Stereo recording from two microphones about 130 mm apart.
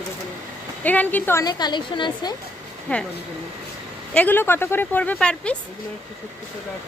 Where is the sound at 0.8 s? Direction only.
15° left (ahead or behind).